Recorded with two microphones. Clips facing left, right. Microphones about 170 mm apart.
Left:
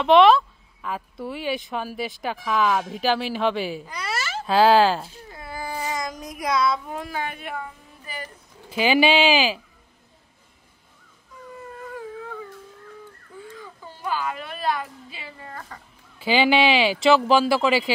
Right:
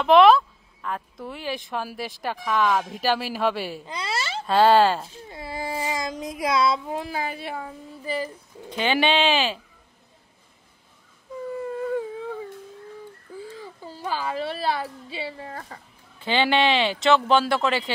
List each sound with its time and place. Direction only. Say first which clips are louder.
0.0 s speech: even; centre (ahead or behind)
3.8 s giggle: right 1 dB; 25° right (ahead or behind)
4.5 s speech: even; centre (ahead or behind)
5.3 s child singing: right 2 dB; 30° right (ahead or behind)
8.6 s speech: left 3 dB; 5° left (ahead or behind)
13.4 s a woman's voice: right 2 dB; 30° right (ahead or behind)
16.2 s speech: left 2 dB; 5° left (ahead or behind)